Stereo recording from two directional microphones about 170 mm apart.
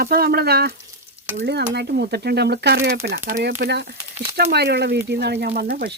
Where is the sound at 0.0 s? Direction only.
65° right (ahead or behind).